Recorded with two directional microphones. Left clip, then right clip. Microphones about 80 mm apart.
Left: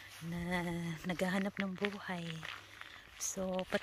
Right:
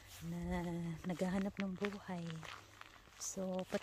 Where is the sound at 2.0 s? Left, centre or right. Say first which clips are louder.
Left 6 dB; centre.